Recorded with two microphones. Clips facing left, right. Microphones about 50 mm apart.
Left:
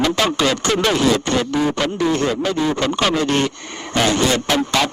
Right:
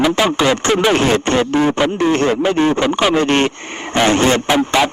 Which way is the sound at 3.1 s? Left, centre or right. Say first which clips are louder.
Right 4 dB; right.